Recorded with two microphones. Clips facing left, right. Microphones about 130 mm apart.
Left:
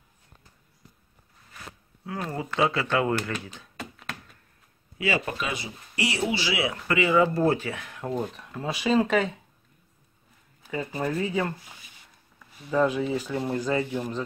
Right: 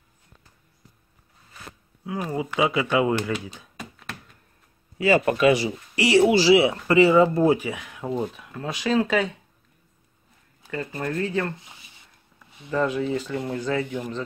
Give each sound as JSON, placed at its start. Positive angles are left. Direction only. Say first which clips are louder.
{"t": 2.0, "sound": "speech", "louder": "right 4 dB", "side_deg": -10}
{"t": 4.9, "sound": "a man's voice", "louder": "right 7 dB", "side_deg": -40}
{"t": 5.2, "sound": "speech", "louder": "right 13 dB", "side_deg": -80}
{"t": 6.3, "sound": "speech", "louder": "right 11 dB", "side_deg": -30}
{"t": 7.2, "sound": "speech", "louder": "right 4 dB", "side_deg": -15}
{"t": 10.7, "sound": "speech", "louder": "even", "side_deg": 5}
{"t": 11.5, "sound": "speech", "louder": "even", "side_deg": -20}
{"t": 12.6, "sound": "speech", "louder": "even", "side_deg": 5}